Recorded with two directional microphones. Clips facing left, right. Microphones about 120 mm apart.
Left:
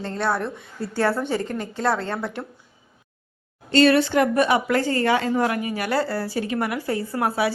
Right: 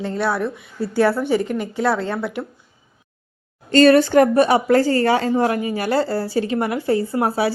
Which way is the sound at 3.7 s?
40° right (ahead or behind).